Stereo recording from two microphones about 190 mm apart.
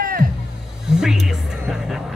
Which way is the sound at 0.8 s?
5° right (ahead or behind).